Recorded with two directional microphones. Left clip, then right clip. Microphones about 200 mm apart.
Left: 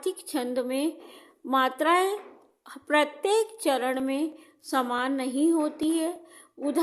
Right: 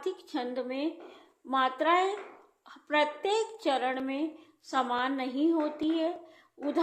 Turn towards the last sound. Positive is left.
turn(degrees=30)  # may be behind; listen again after turning